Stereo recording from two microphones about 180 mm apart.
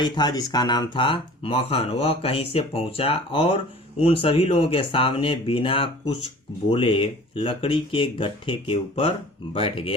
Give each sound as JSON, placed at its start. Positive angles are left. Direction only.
{"t": 0.0, "sound": "speech", "side_deg": 25}